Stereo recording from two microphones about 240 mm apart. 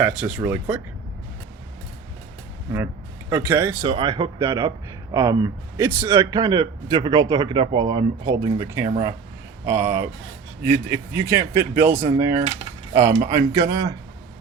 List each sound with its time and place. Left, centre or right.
0.0 s speech: centre
0.3 s a man's voice: centre
2.7 s speech: centre
3.8 s speech: right
4.4 s a man's voice: centre